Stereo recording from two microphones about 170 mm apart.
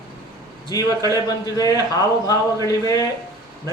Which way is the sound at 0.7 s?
20° left (ahead or behind).